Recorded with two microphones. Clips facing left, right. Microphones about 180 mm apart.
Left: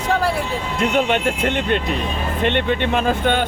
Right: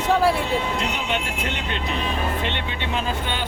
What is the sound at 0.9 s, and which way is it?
Speech, 55° left (ahead or behind).